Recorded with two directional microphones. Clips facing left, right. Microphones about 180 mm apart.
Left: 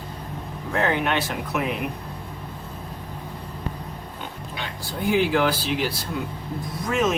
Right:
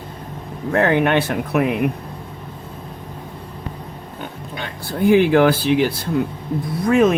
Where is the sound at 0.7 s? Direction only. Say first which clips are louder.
Right 7 dB; 60° right (ahead or behind).